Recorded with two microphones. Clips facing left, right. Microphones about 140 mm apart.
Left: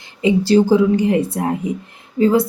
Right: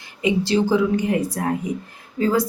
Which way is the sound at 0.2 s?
35° left (ahead or behind).